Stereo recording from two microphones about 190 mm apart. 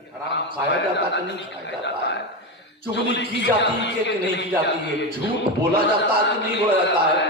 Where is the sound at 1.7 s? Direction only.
65° left (ahead or behind).